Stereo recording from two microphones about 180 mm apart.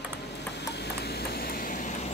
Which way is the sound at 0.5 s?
70° left (ahead or behind).